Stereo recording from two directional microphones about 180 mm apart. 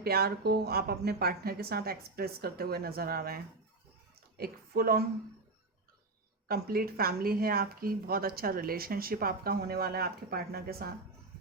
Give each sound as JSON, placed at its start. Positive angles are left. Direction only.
{"t": 0.0, "sound": "a woman's voice", "side_deg": -60}
{"t": 6.5, "sound": "speech", "side_deg": -55}